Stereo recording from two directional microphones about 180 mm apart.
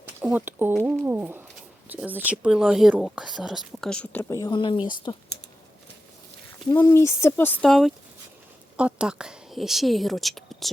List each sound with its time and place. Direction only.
0.2 s speech: 10° right (ahead or behind); by 5.2 s 25° left (ahead or behind)
6.7 s a woman's voice: 15° left (ahead or behind)